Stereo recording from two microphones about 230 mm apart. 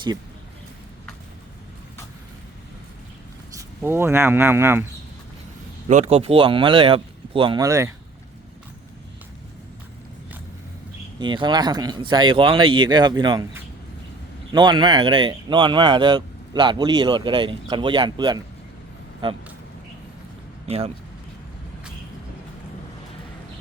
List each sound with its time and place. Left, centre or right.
3.8 s speech: centre
5.9 s speech: right; by 7.9 s centre
11.2 s speech: centre
20.7 s speech: right